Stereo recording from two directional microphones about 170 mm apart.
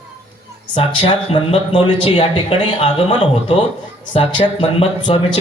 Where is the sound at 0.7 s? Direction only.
30° left (ahead or behind).